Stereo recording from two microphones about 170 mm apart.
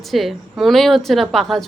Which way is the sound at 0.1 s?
Centre (ahead or behind).